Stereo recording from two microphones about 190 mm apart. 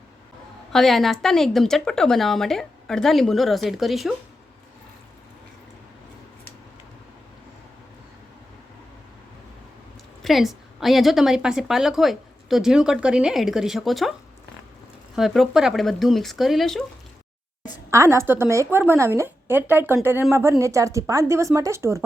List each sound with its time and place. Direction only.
0.7 s a woman's voice: centre (ahead or behind)
10.2 s a woman's voice: centre (ahead or behind)
15.1 s a woman's voice: centre (ahead or behind)
17.9 s a woman's voice: 15° right (ahead or behind)